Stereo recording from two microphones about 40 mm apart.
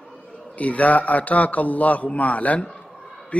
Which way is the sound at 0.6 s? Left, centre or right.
Left.